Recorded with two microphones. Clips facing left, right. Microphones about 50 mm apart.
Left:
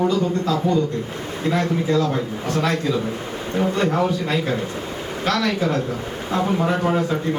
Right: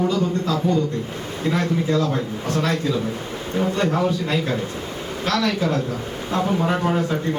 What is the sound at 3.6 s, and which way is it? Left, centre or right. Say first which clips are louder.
A man's voice: left 1 dB; centre.